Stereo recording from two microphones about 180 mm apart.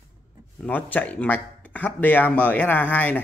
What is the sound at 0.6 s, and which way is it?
Speech, 10° left (ahead or behind).